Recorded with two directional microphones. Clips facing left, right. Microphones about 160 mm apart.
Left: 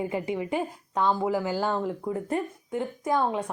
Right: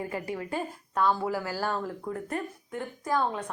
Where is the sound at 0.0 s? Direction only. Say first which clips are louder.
Left 5 dB; 20° left (ahead or behind).